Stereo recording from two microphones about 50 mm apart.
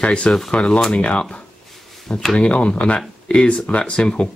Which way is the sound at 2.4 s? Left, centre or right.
Left.